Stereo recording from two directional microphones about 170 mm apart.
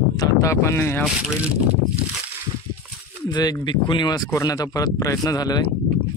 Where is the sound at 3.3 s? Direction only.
25° left (ahead or behind).